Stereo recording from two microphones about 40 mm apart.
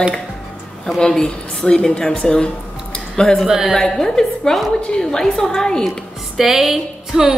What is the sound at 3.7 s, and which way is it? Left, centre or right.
A woman's voice, centre.